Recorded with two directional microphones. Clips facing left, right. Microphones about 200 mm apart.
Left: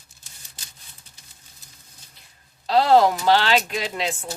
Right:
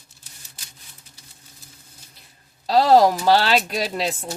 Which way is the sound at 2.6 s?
35° right (ahead or behind).